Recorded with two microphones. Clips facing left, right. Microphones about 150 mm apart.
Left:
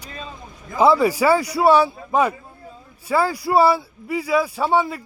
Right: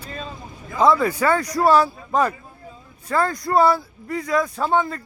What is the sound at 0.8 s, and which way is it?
A man's voice, 10° left (ahead or behind).